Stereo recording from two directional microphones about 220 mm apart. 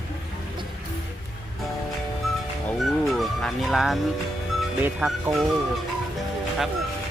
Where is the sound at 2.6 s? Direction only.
Centre (ahead or behind).